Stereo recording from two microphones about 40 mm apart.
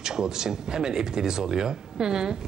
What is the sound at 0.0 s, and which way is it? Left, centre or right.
A man's voice, centre.